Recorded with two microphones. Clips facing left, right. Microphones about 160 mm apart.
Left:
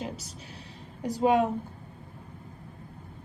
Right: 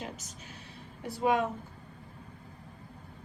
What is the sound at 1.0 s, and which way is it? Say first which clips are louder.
Speech: left 5 dB; 40° left (ahead or behind).